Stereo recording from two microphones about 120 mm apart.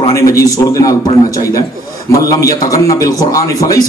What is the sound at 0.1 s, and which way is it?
A man's voice, 30° left (ahead or behind).